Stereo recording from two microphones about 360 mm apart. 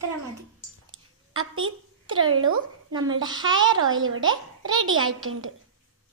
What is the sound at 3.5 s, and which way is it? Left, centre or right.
A child's voice, right.